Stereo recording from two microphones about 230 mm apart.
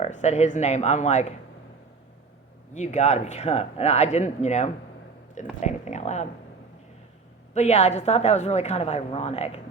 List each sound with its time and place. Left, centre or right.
0.0 s a woman's voice: left
2.7 s a woman's voice: left
7.5 s a woman's voice: left